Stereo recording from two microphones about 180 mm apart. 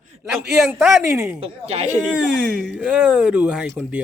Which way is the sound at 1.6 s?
35° right (ahead or behind).